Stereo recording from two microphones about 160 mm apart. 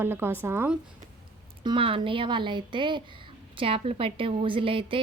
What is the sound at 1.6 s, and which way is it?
A woman's voice, 35° right (ahead or behind).